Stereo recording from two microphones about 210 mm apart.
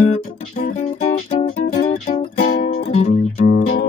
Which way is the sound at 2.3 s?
40° left (ahead or behind).